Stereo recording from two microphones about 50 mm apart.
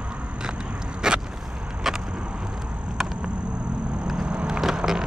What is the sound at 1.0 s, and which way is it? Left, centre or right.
Vehicle, centre.